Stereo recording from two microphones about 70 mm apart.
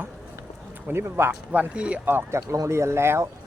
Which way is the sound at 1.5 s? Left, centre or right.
Centre.